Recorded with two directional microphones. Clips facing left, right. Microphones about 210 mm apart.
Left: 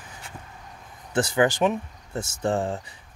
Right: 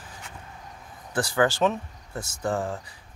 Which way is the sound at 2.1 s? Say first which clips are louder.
Left 3 dB; 30° left (ahead or behind).